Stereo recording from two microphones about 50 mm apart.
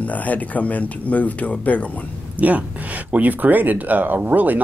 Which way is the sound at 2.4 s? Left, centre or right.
Right.